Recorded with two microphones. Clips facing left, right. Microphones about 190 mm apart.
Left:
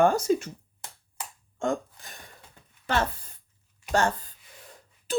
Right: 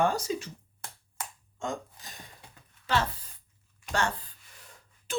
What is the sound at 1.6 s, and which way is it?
Hiccup, 55° left (ahead or behind).